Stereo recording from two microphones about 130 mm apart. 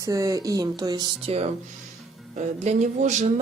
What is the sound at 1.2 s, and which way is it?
Speech, 55° right (ahead or behind).